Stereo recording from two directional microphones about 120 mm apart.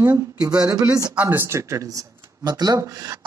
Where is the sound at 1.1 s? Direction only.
15° right (ahead or behind); by 3.2 s 30° right (ahead or behind).